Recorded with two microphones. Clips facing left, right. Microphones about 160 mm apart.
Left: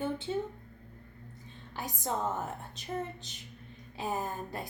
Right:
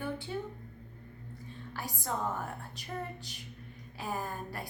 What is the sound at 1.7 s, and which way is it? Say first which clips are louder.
A woman's voice: left 2 dB; 20° left (ahead or behind).